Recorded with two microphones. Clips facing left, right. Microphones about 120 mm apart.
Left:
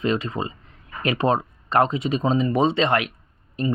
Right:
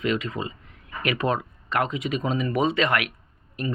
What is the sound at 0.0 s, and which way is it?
Speech, 30° left (ahead or behind).